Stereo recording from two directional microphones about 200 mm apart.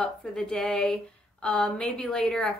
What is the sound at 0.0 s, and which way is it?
A woman's voice, 5° left (ahead or behind).